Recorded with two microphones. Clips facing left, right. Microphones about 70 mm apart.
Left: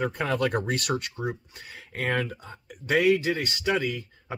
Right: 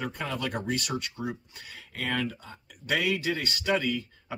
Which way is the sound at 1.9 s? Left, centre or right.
Left.